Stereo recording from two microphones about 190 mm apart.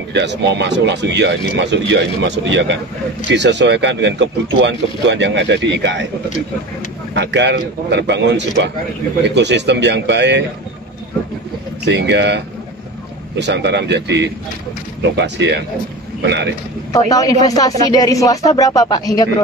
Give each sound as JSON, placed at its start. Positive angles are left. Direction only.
{"t": 0.1, "sound": "speech", "side_deg": -65}
{"t": 7.2, "sound": "speech", "side_deg": -65}
{"t": 11.8, "sound": "a man's voice", "side_deg": -65}
{"t": 17.1, "sound": "a sound", "side_deg": 20}